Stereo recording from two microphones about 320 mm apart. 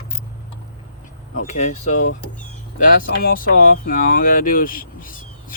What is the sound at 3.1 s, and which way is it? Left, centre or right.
Speech, left.